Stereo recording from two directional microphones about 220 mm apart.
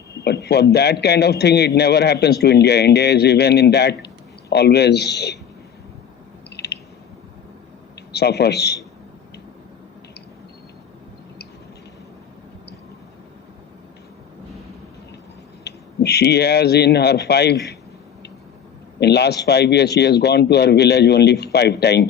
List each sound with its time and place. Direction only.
0.3 s a man's voice: 50° left (ahead or behind)
6.6 s a sound: 50° left (ahead or behind)
8.1 s a man's voice: 50° left (ahead or behind)
15.6 s speech: 50° left (ahead or behind)
18.9 s a man's voice: 50° left (ahead or behind)